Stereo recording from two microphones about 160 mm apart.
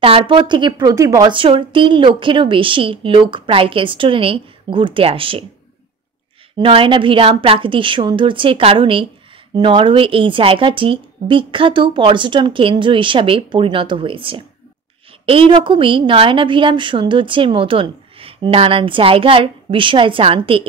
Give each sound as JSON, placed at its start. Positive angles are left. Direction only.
{"t": 0.0, "sound": "speech", "side_deg": -35}
{"t": 1.3, "sound": "a woman's voice", "side_deg": -30}
{"t": 6.6, "sound": "a woman's voice", "side_deg": -35}